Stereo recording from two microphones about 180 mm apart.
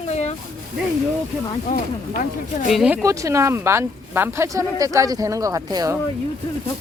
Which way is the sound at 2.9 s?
15° right (ahead or behind).